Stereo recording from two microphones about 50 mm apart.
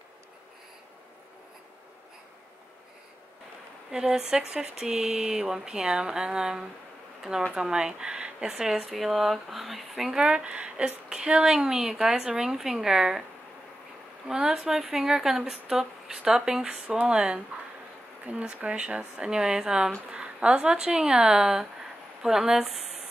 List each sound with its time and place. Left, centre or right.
3.9 s a woman's voice: centre
10.2 s a woman's voice: right
14.2 s a woman's voice: centre